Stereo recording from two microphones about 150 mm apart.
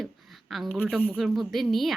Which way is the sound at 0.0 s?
Centre (ahead or behind).